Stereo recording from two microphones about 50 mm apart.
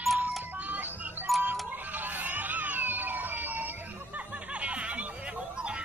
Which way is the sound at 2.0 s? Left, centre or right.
Right.